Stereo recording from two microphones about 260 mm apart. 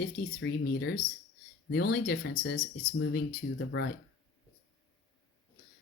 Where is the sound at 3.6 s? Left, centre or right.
Left.